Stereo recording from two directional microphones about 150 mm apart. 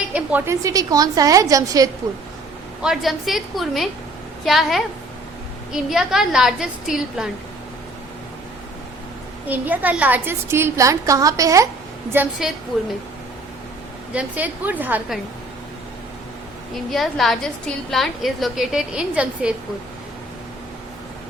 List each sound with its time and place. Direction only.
0.1 s a sound: 10° right (ahead or behind)
0.6 s a woman's voice: 25° right (ahead or behind)
2.8 s a woman's voice: centre (ahead or behind)
9.5 s a woman's voice: 10° right (ahead or behind)
12.4 s a woman's voice: 5° right (ahead or behind)
14.1 s a woman's voice: 10° right (ahead or behind)
16.9 s a woman's voice: centre (ahead or behind)